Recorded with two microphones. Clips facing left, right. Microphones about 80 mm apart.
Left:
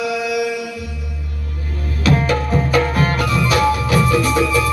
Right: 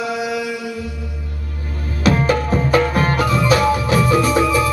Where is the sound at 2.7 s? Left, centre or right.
Right.